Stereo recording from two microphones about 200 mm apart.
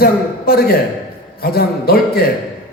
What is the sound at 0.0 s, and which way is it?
A man's voice, 50° left (ahead or behind).